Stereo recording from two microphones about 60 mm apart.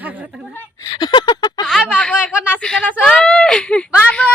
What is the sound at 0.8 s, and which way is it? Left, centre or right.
Speech, left.